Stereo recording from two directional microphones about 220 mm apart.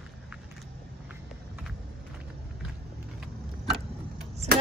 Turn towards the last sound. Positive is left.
turn(degrees=-30)  # may be behind; listen again after turning